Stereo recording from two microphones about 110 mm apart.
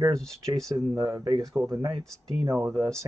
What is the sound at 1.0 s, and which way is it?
Speech, 30° right (ahead or behind).